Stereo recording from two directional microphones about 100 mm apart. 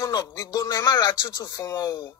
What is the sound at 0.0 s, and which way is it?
Music, 35° left (ahead or behind).